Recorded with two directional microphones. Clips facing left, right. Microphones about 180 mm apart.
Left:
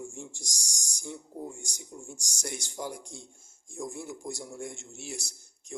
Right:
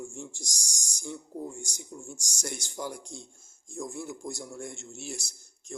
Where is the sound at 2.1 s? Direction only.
20° left (ahead or behind).